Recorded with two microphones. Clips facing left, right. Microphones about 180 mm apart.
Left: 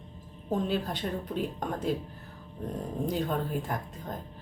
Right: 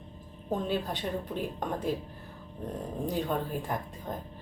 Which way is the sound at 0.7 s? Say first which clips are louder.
Even; centre (ahead or behind).